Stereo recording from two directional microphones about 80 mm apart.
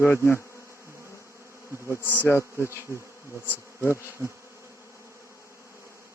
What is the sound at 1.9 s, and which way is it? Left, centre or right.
Bee, left.